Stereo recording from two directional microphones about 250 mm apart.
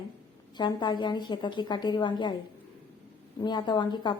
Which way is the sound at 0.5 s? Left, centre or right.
Centre.